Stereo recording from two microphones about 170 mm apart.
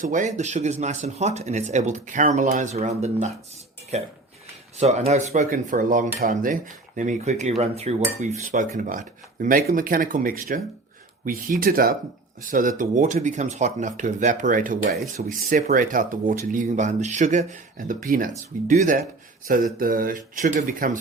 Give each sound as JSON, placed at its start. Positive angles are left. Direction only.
{"t": 0.0, "sound": "speech", "side_deg": -50}